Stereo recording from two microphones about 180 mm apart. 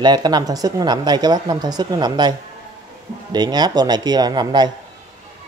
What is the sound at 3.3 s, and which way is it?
Speech, 25° right (ahead or behind).